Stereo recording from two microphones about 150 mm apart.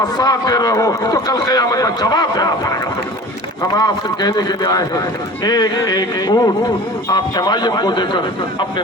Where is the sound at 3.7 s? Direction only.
25° left (ahead or behind).